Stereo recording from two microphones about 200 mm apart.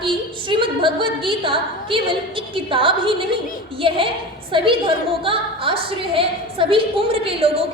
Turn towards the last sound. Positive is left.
turn(degrees=-30)  # may be behind; listen again after turning